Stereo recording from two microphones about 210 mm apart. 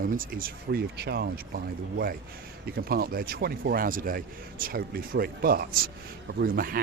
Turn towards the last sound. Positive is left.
turn(degrees=-45)  # may be behind; listen again after turning